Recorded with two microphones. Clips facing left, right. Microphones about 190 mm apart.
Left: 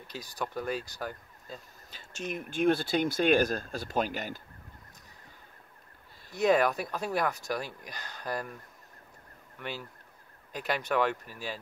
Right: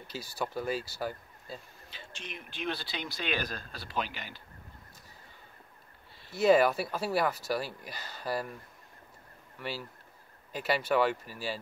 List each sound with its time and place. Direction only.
0.0 s speech: 5° right (ahead or behind)
1.9 s speech: 45° left (ahead or behind)
6.4 s speech: 5° right (ahead or behind)
9.6 s speech: 5° right (ahead or behind)